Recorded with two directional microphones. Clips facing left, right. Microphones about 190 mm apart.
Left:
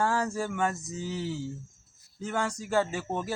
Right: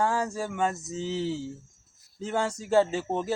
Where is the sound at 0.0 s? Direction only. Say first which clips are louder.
Right 1 dB; 15° right (ahead or behind).